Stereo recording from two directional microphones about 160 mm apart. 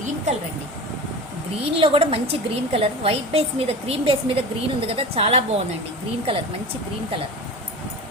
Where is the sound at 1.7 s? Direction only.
35° right (ahead or behind).